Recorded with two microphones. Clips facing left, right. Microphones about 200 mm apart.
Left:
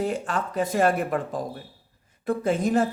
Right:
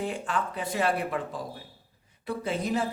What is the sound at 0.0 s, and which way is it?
Speech, 45° left (ahead or behind).